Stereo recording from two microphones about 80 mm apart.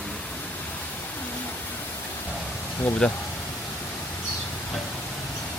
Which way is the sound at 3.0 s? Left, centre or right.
Centre.